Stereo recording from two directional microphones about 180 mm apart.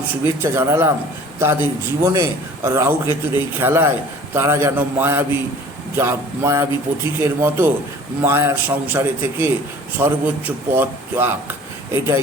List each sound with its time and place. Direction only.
0.1 s a man's voice: 15° right (ahead or behind)